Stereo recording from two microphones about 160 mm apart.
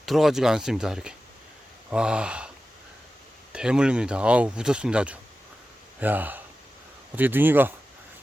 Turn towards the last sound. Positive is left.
turn(degrees=-10)  # may be behind; listen again after turning